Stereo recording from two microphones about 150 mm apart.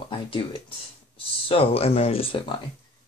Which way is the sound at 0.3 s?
35° left (ahead or behind).